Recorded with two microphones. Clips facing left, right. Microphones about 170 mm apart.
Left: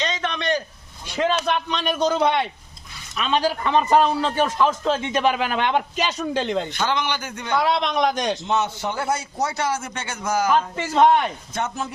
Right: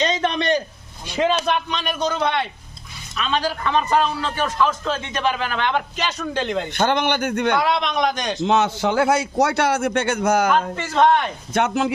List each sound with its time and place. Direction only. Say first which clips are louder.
0.0 s a sound: right 5 dB; 35° right (ahead or behind)
1.1 s a man's voice: right 2 dB; 15° right (ahead or behind)
1.5 s a man's voice: even; centre (ahead or behind)
6.4 s a man's voice: right 2 dB; centre (ahead or behind)
6.7 s a man's voice: right 4 dB; 55° right (ahead or behind)
7.6 s a man's voice: even; centre (ahead or behind)
8.4 s a man's voice: right 5 dB; 90° right; by 10.5 s 60° right (ahead or behind)
10.8 s a man's voice: left 2 dB; 10° left (ahead or behind)
11.5 s a man's voice: right 10 dB; 75° right (ahead or behind)